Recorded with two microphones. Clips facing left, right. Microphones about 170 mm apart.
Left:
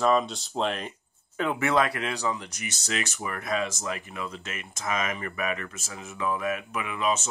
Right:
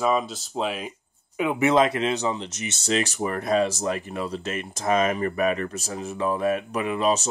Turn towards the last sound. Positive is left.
turn(degrees=-35)  # may be behind; listen again after turning